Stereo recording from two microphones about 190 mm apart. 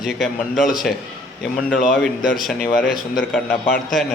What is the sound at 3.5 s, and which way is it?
Speech, 50° left (ahead or behind).